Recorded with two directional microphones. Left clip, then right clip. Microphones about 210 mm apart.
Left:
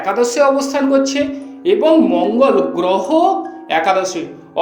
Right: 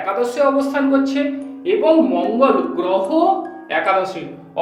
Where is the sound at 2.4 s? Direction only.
45° left (ahead or behind).